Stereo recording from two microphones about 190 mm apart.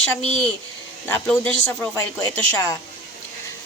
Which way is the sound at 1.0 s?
10° left (ahead or behind).